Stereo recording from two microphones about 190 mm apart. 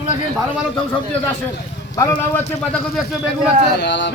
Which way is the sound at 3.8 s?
70° left (ahead or behind).